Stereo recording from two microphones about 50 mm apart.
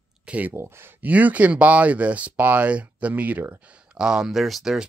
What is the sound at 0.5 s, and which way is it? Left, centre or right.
Speech, right.